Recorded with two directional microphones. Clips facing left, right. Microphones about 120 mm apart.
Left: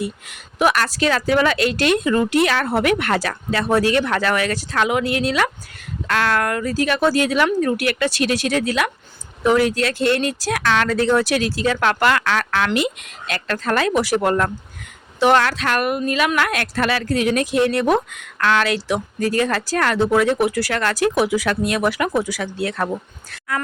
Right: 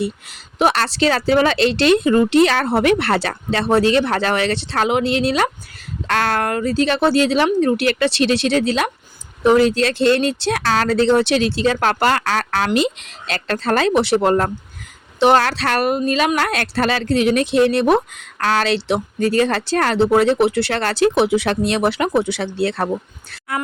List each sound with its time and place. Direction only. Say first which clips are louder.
0.0 s speech: right 3 dB; 30° right (ahead or behind)
6.1 s speech: right 1 dB; 40° right (ahead or behind)
12.7 s speech: right 3 dB; 25° right (ahead or behind)
18.3 s speech: right 1 dB; 35° right (ahead or behind)